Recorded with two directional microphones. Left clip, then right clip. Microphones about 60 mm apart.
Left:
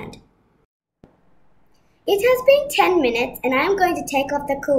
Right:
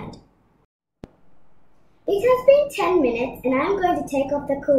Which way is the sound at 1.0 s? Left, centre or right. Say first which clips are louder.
Right 8 dB; centre.